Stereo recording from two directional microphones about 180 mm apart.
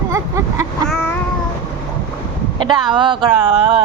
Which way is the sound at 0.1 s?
15° right (ahead or behind).